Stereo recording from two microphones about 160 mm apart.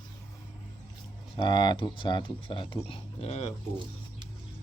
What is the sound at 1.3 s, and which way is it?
Speech, 30° left (ahead or behind).